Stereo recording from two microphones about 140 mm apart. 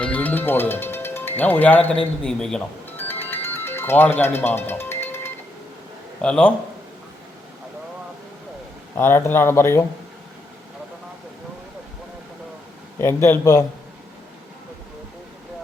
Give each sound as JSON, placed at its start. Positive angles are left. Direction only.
{"t": 0.0, "sound": "speech", "side_deg": 10}
{"t": 3.0, "sound": "music", "side_deg": 15}
{"t": 6.2, "sound": "speech", "side_deg": 5}
{"t": 9.0, "sound": "speech", "side_deg": 15}
{"t": 13.0, "sound": "speech", "side_deg": 15}